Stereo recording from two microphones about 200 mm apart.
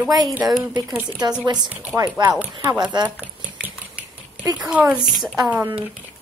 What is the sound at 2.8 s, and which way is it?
Speech, 20° right (ahead or behind).